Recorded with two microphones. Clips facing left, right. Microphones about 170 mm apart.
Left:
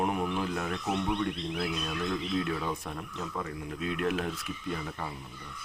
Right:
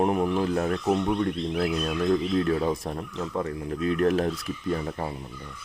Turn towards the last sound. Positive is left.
turn(degrees=-40)  # may be behind; listen again after turning